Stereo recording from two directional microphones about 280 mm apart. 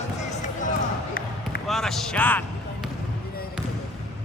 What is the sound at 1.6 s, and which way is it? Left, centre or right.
Speech, centre.